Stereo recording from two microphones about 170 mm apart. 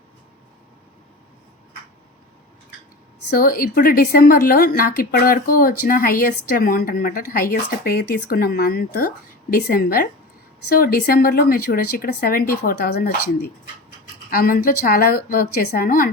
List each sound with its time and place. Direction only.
3.2 s a woman's voice: 60° left (ahead or behind)
14.3 s a woman's voice: 60° left (ahead or behind)